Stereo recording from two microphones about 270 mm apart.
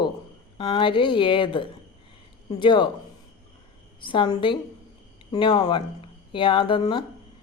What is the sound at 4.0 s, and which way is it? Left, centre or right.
Speech, centre.